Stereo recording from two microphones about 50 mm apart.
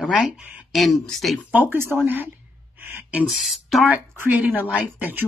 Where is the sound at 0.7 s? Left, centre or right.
Centre.